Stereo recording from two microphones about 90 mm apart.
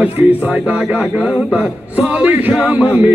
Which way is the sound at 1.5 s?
15° right (ahead or behind).